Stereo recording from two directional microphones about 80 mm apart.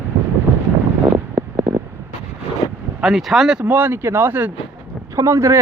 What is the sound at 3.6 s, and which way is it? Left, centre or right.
Speech, right.